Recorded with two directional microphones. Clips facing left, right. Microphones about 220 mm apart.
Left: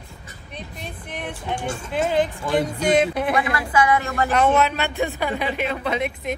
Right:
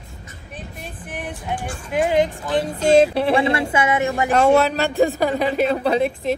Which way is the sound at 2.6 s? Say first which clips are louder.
Right 6 dB; 25° right (ahead or behind).